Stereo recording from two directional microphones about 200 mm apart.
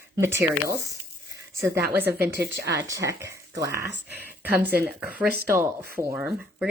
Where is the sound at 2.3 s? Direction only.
60° right (ahead or behind).